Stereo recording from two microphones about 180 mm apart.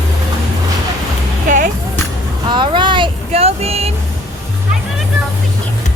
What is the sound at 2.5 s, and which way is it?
Vehicle, 25° right (ahead or behind).